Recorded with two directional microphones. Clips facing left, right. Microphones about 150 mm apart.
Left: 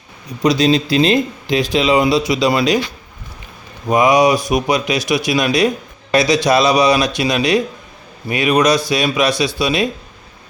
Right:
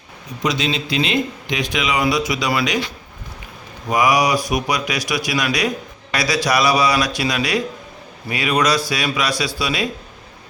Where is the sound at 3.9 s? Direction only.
25° left (ahead or behind).